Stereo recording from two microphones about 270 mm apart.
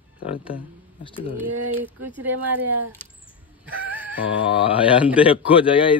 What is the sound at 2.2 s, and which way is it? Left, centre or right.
Speech, centre.